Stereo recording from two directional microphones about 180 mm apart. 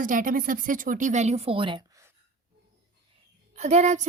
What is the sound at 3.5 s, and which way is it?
Speech, 40° right (ahead or behind).